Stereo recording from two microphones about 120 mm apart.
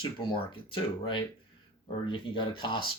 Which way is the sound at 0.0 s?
45° left (ahead or behind).